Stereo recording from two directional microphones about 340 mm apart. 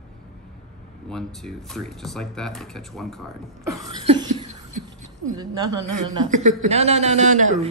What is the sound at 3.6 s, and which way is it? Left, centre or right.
Cough, centre.